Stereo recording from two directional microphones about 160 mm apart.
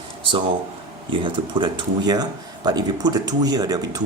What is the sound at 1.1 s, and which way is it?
Speech, 30° right (ahead or behind).